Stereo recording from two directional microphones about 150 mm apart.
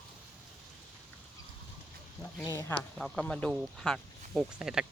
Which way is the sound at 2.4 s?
25° left (ahead or behind).